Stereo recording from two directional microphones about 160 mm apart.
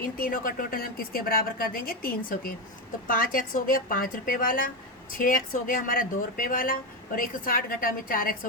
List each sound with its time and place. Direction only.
0.0 s a woman's voice: 60° left (ahead or behind)